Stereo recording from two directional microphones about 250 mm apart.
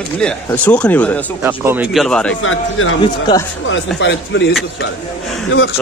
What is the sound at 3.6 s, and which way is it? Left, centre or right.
Speech, left.